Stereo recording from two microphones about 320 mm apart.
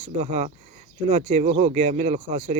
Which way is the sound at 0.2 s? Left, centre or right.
Right.